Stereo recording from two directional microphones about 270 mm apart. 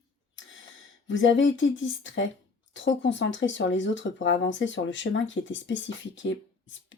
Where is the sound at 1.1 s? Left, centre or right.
Left.